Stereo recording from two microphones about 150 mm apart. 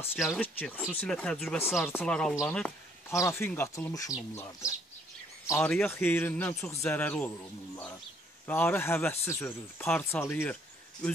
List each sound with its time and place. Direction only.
0.4 s speech: 10° left (ahead or behind)
3.1 s speech: 20° left (ahead or behind)
5.5 s speech: 10° left (ahead or behind)
8.5 s speech: 10° left (ahead or behind)